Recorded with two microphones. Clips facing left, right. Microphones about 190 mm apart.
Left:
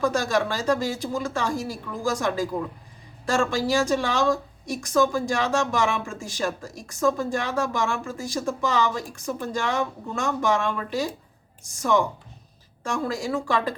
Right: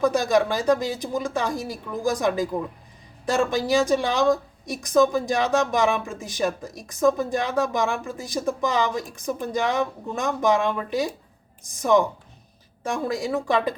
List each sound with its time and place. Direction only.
0.0 s a woman's voice: 20° right (ahead or behind)